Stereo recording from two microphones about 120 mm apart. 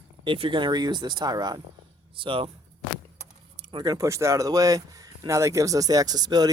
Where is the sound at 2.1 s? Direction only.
45° right (ahead or behind).